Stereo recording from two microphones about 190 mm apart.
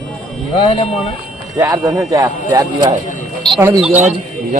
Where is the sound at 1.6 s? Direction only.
15° right (ahead or behind).